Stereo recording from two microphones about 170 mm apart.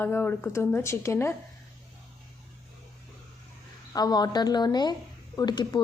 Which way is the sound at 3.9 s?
25° left (ahead or behind).